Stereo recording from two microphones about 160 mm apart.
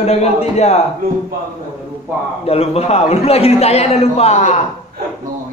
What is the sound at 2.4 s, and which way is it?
A man's voice, 40° left (ahead or behind).